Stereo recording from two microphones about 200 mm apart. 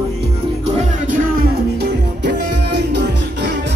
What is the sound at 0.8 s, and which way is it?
Music, 45° right (ahead or behind).